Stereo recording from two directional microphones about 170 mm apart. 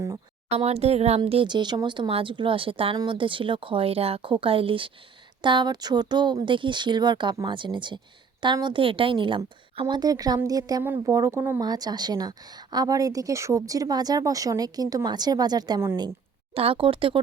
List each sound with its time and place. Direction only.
0.5 s speech: 40° right (ahead or behind); by 16.1 s 15° right (ahead or behind)
16.6 s speech: 30° right (ahead or behind)